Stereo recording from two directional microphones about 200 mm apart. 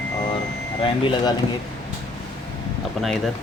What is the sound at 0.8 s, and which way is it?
Speech, 25° left (ahead or behind).